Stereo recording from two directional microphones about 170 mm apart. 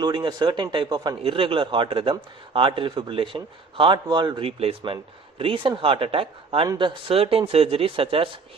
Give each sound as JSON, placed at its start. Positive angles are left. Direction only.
{"t": 0.0, "sound": "speech", "side_deg": -25}